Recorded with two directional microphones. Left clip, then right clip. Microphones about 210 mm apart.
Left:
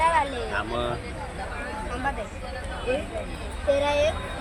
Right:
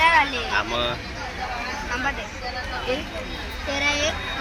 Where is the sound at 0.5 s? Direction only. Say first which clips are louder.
Right 5 dB; 15° left (ahead or behind).